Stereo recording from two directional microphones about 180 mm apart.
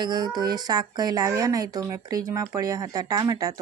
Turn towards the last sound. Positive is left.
turn(degrees=-20)  # may be behind; listen again after turning